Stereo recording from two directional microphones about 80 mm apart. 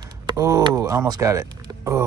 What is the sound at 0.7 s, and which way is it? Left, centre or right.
Speech, right.